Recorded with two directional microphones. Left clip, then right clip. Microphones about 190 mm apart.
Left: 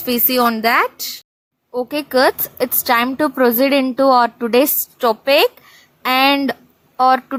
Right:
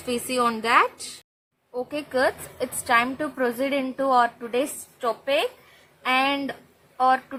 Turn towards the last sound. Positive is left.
turn(degrees=40)  # may be behind; listen again after turning